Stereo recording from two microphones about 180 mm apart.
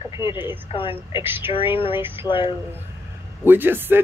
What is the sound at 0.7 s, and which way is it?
Speech, 30° left (ahead or behind).